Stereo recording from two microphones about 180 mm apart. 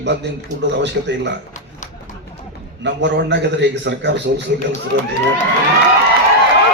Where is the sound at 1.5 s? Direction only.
45° left (ahead or behind).